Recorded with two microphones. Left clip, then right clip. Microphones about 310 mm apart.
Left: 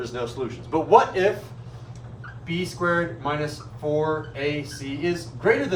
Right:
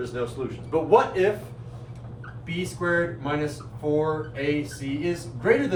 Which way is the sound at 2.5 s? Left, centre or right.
Centre.